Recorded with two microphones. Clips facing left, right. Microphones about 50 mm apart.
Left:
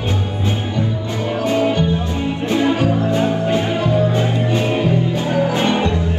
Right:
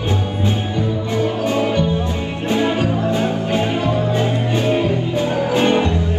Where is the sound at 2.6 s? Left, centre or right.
Right.